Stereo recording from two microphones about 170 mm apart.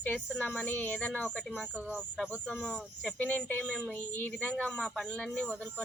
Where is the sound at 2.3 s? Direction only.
5° left (ahead or behind).